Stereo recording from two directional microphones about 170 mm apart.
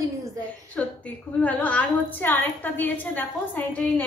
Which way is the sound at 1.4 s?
10° left (ahead or behind).